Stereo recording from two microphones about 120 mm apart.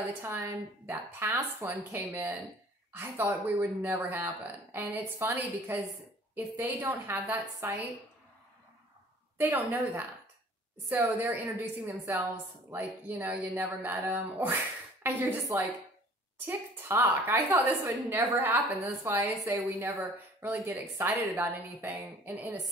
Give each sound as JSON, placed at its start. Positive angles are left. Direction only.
{"t": 0.0, "sound": "a woman's voice", "side_deg": -20}
{"t": 9.4, "sound": "a woman's voice", "side_deg": -20}
{"t": 16.4, "sound": "a woman's voice", "side_deg": -20}